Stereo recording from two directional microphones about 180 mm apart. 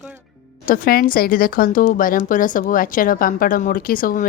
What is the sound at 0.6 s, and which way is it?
A woman's voice, 50° left (ahead or behind).